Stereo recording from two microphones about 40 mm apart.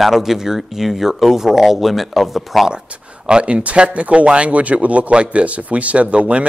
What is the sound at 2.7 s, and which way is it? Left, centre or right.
Speech, right.